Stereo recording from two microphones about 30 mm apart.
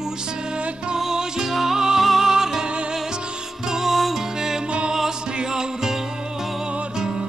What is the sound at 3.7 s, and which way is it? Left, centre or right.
Music, centre.